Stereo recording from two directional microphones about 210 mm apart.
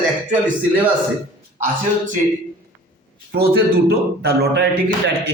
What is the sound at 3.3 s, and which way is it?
A man's voice, 50° right (ahead or behind).